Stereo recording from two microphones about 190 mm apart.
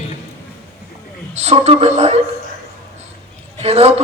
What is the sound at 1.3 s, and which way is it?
Speech, 35° right (ahead or behind).